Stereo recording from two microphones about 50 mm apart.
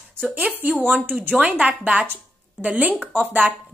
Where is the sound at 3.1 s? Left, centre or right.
Right.